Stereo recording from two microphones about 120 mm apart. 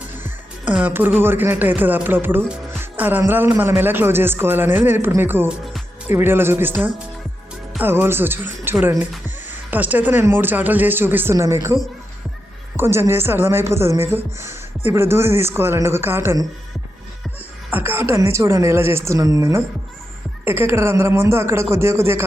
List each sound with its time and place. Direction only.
0.7 s speech: 15° right (ahead or behind)
5.5 s music: centre (ahead or behind)
6.1 s speech: 20° right (ahead or behind)
17.7 s a woman's voice: 15° right (ahead or behind)